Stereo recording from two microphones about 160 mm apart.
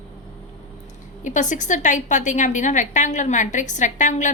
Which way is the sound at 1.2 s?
50° left (ahead or behind).